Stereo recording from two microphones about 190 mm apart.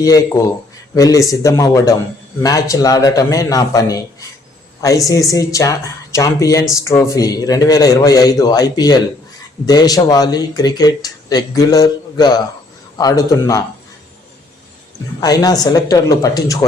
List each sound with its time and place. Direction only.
0.0 s speech: 15° left (ahead or behind)
15.2 s speech: 20° left (ahead or behind)